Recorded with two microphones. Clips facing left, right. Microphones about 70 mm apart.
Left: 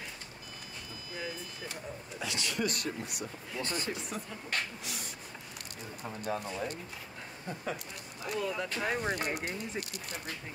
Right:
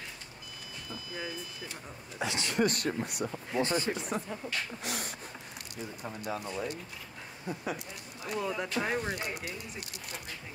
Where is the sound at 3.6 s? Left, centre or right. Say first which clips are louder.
Right 7 dB; right.